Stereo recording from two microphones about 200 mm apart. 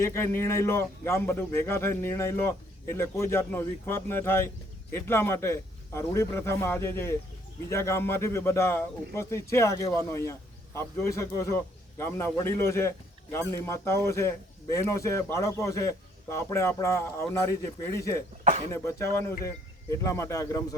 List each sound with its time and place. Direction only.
0.0 s a man's voice: 15° left (ahead or behind)
18.4 s speech: 35° right (ahead or behind)
18.7 s a man's voice: 15° left (ahead or behind)